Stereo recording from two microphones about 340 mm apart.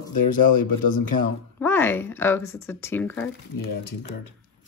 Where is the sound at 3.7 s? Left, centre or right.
Left.